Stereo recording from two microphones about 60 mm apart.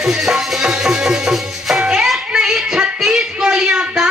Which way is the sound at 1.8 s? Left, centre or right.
Centre.